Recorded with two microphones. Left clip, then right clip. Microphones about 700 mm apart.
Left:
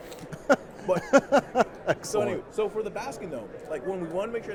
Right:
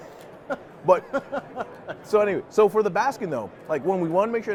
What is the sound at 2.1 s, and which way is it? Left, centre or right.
A man's voice, right.